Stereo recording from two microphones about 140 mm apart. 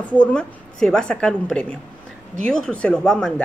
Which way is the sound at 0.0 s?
10° left (ahead or behind).